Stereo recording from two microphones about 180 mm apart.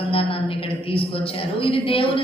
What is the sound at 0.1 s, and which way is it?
A woman's voice, 30° left (ahead or behind).